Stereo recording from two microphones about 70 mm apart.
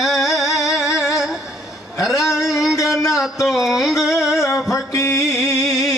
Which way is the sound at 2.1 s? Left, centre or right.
Left.